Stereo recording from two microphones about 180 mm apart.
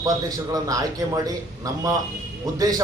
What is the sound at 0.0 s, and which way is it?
A man's voice, 20° right (ahead or behind).